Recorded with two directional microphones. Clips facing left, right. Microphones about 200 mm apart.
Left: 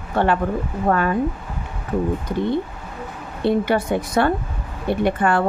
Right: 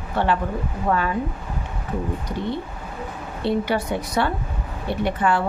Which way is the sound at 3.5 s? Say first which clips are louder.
Left 4 dB; 50° left (ahead or behind).